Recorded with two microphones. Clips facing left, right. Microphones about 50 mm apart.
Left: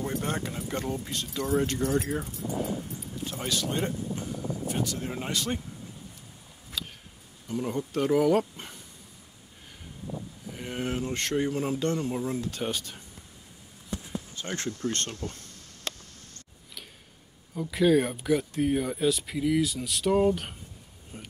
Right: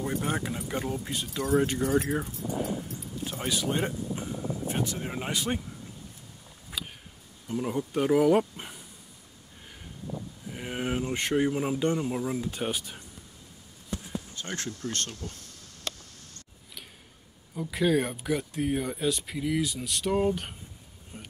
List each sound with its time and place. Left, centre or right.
0.0 s speech: centre
3.3 s speech: centre
6.7 s a sound: centre
7.4 s speech: centre
10.5 s speech: centre
14.4 s speech: centre
14.9 s speech: left
17.6 s speech: centre